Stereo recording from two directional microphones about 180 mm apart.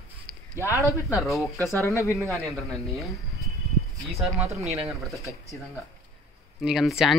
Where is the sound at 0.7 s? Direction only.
15° left (ahead or behind).